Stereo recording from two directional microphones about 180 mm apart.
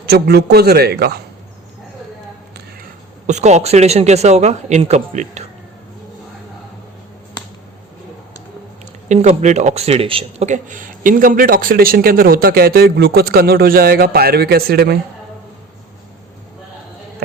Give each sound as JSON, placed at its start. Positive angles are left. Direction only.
{"t": 0.0, "sound": "a man's voice", "side_deg": -65}
{"t": 3.2, "sound": "speech", "side_deg": -40}
{"t": 9.0, "sound": "speech", "side_deg": -40}